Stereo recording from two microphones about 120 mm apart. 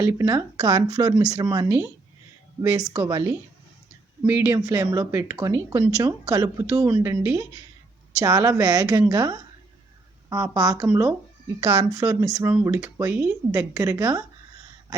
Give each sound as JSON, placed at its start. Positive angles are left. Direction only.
{"t": 0.0, "sound": "speech", "side_deg": -25}
{"t": 11.6, "sound": "speech", "side_deg": -30}